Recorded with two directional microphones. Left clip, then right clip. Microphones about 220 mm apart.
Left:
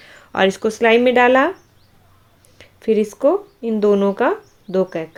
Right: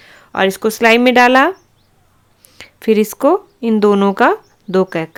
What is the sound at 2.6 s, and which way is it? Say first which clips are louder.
A woman's voice: right 4 dB; 30° right (ahead or behind).